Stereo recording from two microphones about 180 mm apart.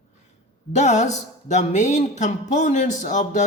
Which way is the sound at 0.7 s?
40° left (ahead or behind).